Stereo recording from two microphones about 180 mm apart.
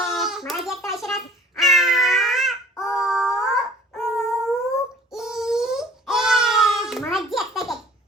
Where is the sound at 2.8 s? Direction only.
Centre (ahead or behind).